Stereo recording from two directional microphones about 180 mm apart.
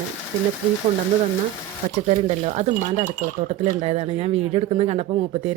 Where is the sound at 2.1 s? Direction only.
40° right (ahead or behind).